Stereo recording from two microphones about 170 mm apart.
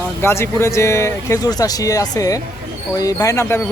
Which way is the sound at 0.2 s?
15° left (ahead or behind).